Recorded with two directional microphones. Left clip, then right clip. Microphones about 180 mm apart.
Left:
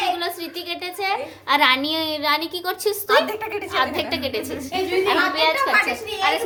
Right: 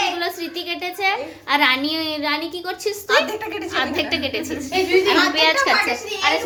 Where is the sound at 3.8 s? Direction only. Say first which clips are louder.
Right 1 dB; 5° left (ahead or behind).